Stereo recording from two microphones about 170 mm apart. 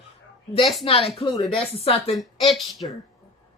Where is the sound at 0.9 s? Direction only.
35° left (ahead or behind).